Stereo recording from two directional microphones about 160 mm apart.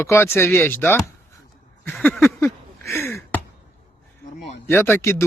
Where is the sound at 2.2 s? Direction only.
15° left (ahead or behind).